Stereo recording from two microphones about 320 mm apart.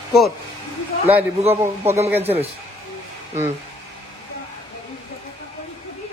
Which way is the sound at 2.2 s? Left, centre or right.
Centre.